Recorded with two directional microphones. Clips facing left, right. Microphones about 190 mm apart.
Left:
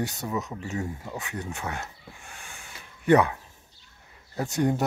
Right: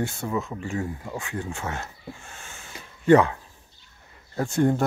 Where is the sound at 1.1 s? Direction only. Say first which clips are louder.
Right 3 dB; 20° left (ahead or behind).